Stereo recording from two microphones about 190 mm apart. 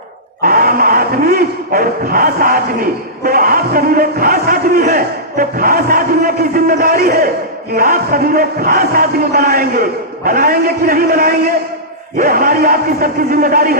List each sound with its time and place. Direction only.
0.4 s speech: 50° right (ahead or behind)